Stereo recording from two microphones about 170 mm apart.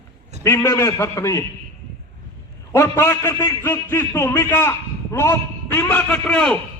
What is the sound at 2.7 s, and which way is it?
A man's voice, 15° left (ahead or behind).